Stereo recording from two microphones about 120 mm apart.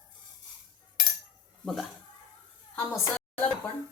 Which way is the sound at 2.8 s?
25° left (ahead or behind).